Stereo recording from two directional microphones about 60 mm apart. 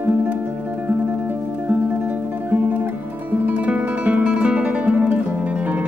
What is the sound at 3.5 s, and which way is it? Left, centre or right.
Guitar, right.